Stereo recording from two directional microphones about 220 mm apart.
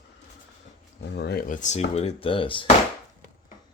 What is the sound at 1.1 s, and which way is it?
Speech, 45° left (ahead or behind).